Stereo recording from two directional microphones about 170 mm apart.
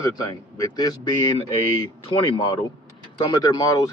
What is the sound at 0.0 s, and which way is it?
Speech, 20° left (ahead or behind).